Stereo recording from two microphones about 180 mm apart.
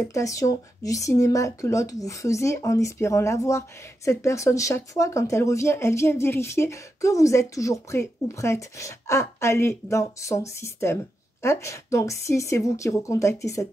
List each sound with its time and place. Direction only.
0.1 s speech: 20° left (ahead or behind)